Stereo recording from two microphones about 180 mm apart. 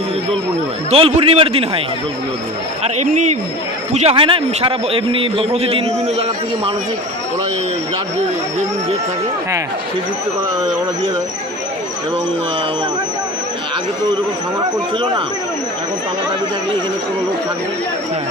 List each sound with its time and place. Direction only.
0.9 s a man's voice: 35° right (ahead or behind)
2.8 s a man's voice: 40° right (ahead or behind)